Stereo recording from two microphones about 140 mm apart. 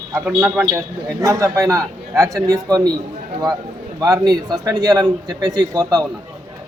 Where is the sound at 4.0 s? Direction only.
30° right (ahead or behind).